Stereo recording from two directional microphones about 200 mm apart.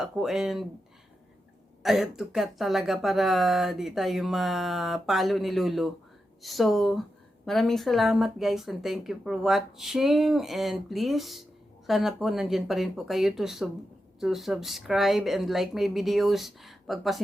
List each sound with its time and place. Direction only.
0.0 s speech: centre (ahead or behind)
1.8 s speech: centre (ahead or behind)